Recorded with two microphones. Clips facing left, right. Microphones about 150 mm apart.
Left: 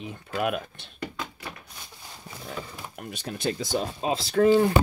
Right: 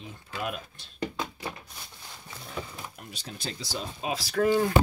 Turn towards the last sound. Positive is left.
turn(degrees=25)  # may be behind; listen again after turning